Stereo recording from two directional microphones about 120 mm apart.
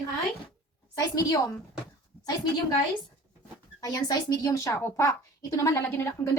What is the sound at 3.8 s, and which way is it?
Speech, 35° left (ahead or behind).